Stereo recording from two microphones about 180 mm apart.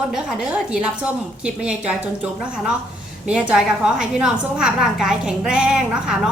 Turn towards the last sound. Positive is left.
turn(degrees=-5)  # may be behind; listen again after turning